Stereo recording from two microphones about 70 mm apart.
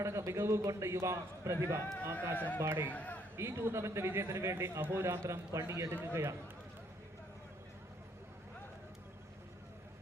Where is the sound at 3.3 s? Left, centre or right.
Right.